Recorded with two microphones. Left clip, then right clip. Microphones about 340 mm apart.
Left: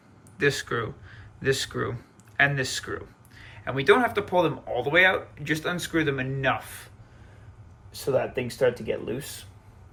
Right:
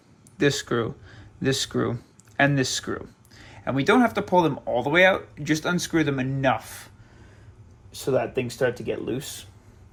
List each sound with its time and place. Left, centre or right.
0.3 s speech: centre
7.9 s speech: right